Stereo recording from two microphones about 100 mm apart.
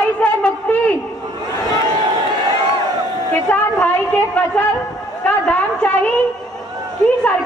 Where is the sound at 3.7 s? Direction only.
10° left (ahead or behind).